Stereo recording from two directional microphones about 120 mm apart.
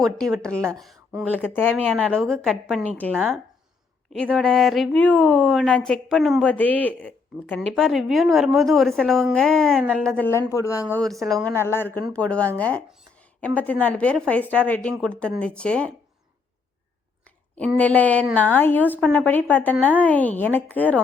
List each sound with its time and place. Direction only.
0.0 s speech: 5° left (ahead or behind)
1.2 s a woman's voice: 10° left (ahead or behind)
1.6 s speech: 5° right (ahead or behind)
2.0 s a woman's voice: 10° left (ahead or behind)
4.1 s speech: 5° left (ahead or behind)
4.9 s a woman's voice: 15° left (ahead or behind)
5.4 s speech: centre (ahead or behind)
6.4 s a woman's voice: 15° left (ahead or behind)
10.2 s a woman's voice: 25° left (ahead or behind); by 15.9 s 10° left (ahead or behind)
17.2 s a sound: 10° left (ahead or behind)
17.7 s a woman's voice: 15° left (ahead or behind)